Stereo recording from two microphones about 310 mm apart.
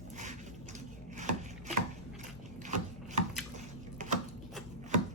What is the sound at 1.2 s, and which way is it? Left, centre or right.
Chopping, right.